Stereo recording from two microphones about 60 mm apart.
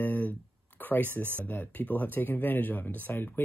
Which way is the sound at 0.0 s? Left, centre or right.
Left.